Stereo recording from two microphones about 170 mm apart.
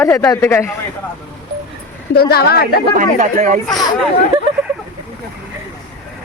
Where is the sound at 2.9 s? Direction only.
50° right (ahead or behind).